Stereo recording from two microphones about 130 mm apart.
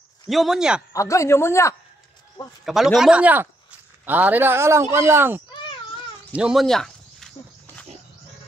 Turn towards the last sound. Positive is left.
turn(degrees=5)  # may be behind; listen again after turning